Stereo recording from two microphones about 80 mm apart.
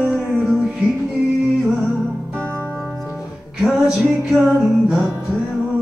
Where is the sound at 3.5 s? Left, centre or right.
Centre.